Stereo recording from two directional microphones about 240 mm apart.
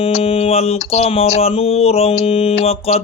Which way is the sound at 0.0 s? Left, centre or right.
Left.